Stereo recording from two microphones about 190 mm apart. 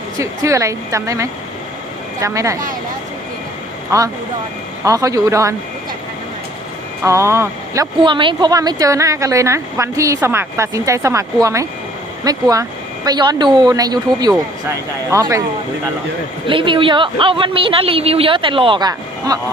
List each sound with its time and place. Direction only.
0.2 s speech: 15° right (ahead or behind)
3.9 s speech: 15° right (ahead or behind)
7.0 s a woman's voice: 15° right (ahead or behind)
16.5 s a woman's voice: 25° right (ahead or behind)